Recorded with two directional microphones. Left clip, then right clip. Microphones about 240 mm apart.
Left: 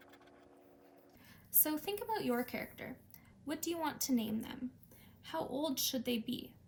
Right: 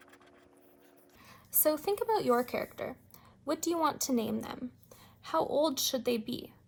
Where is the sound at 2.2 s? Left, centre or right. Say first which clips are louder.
Right 9 dB; right.